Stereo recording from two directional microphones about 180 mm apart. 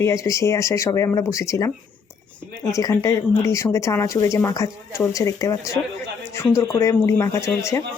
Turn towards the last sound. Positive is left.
turn(degrees=15)  # may be behind; listen again after turning